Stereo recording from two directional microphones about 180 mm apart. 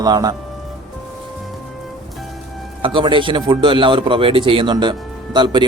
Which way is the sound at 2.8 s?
30° right (ahead or behind).